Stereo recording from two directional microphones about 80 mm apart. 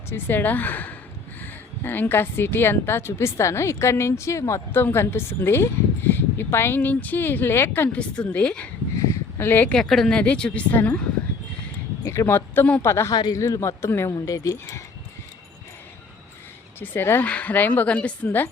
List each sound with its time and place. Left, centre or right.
0.1 s speech: left
7.9 s a woman's voice: centre
9.7 s a woman's voice: centre
12.0 s speech: left
12.3 s speech: left
12.8 s speech: left
14.3 s speech: left
16.8 s speech: left
17.2 s a woman's voice: centre